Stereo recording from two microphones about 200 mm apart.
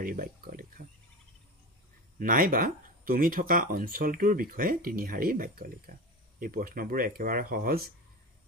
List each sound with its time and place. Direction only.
0.0 s speech: 45° right (ahead or behind)
2.1 s speech: 45° right (ahead or behind)